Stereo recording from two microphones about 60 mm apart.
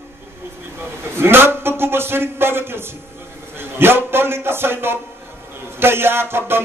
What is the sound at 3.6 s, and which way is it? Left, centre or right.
Speech, right.